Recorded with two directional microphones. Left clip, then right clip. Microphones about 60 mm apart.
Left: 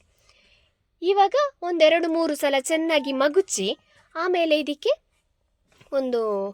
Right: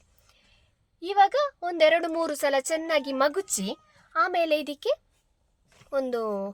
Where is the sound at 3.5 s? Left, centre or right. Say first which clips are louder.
Left 7 dB; left.